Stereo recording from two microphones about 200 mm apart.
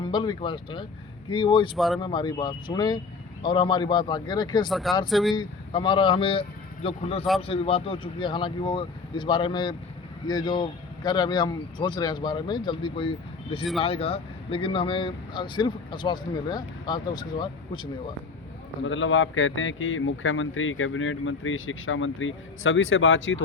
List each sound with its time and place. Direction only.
0.0 s speech: 20° left (ahead or behind)
1.7 s speech: centre (ahead or behind)
2.0 s speech: 25° left (ahead or behind)
4.7 s speech: centre (ahead or behind)
5.4 s speech: 25° left (ahead or behind)
18.9 s speech: 75° left (ahead or behind)